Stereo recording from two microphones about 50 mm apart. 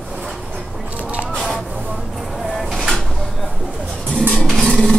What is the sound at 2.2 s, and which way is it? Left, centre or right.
Vehicle, centre.